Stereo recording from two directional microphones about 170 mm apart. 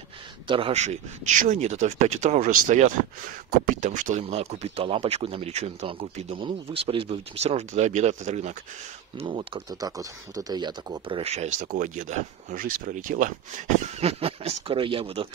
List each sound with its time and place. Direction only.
0.5 s speech: 30° right (ahead or behind)